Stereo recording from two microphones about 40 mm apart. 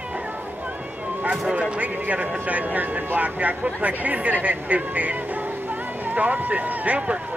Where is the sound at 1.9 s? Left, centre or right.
Right.